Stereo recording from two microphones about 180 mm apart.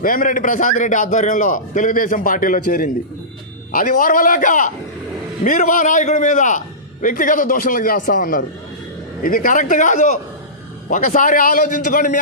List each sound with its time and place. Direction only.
0.0 s a man's voice: 50° left (ahead or behind)